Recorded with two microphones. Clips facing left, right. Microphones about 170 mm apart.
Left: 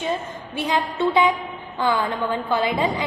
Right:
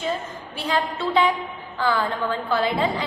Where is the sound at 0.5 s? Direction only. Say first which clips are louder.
Left 1 dB; 20° left (ahead or behind).